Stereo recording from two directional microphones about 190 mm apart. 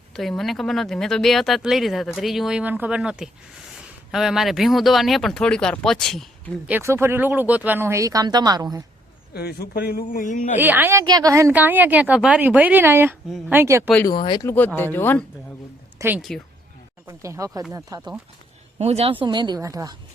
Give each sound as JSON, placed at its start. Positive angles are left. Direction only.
{"t": 0.2, "sound": "speech", "side_deg": 0}
{"t": 6.7, "sound": "a woman's voice", "side_deg": -10}
{"t": 9.3, "sound": "speech", "side_deg": 55}
{"t": 10.6, "sound": "a woman's voice", "side_deg": -10}
{"t": 14.1, "sound": "speech", "side_deg": 25}
{"t": 14.4, "sound": "speech", "side_deg": 10}
{"t": 16.0, "sound": "a woman's voice", "side_deg": -10}
{"t": 18.8, "sound": "speech", "side_deg": -35}